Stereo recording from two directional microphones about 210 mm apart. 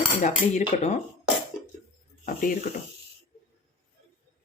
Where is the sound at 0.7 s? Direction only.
35° left (ahead or behind).